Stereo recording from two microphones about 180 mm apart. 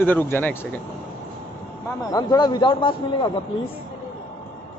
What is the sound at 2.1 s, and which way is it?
A man's voice, 20° left (ahead or behind).